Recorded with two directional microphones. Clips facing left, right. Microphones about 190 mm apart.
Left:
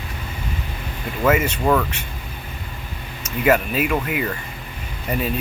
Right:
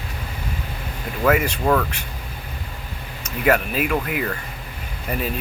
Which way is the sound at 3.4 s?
Centre (ahead or behind).